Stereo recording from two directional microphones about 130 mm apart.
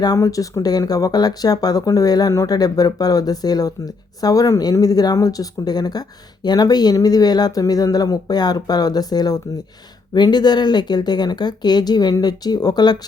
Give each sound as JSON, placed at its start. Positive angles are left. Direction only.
{"t": 0.0, "sound": "speech", "side_deg": 25}